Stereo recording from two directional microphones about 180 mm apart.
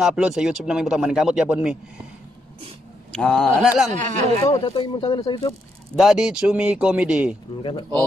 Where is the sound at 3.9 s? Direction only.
40° right (ahead or behind).